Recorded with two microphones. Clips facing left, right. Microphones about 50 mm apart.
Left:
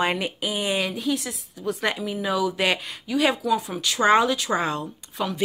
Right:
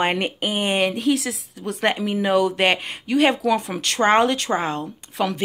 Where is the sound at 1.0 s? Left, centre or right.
Right.